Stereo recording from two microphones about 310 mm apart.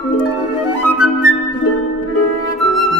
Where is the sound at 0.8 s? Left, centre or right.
Right.